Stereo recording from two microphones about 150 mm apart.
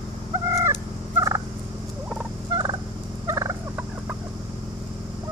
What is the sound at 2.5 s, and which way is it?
Fowl, 25° right (ahead or behind).